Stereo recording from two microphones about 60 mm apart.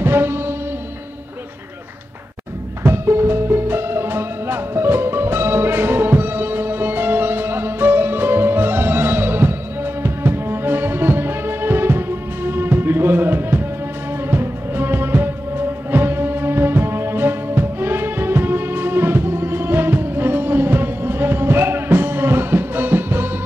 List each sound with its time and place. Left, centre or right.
0.0 s music: right
2.8 s music: right